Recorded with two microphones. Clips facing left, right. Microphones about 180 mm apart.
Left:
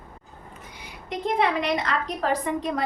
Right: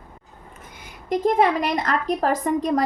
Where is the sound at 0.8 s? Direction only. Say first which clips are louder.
Right 8 dB; 45° right (ahead or behind).